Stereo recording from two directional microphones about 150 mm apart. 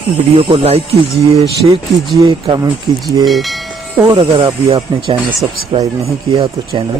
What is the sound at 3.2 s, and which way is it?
Train, centre (ahead or behind).